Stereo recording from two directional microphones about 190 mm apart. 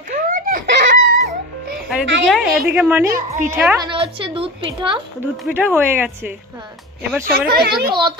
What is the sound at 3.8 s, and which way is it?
A woman's voice, 25° right (ahead or behind).